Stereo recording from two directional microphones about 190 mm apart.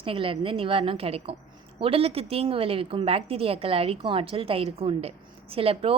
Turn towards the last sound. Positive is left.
turn(degrees=-30)  # may be behind; listen again after turning